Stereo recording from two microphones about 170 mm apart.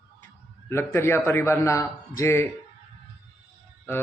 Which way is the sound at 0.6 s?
15° left (ahead or behind).